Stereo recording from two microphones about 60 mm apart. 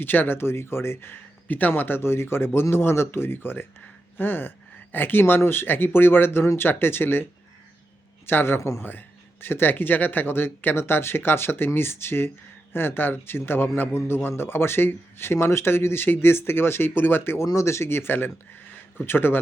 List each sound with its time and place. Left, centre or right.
0.0 s speech: left
1.5 s a man's voice: left
8.3 s speech: left
8.8 s a man's voice: left
17.4 s a man's voice: left